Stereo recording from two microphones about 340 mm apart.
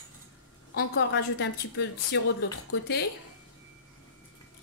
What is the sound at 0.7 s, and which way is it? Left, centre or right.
A woman's voice, left.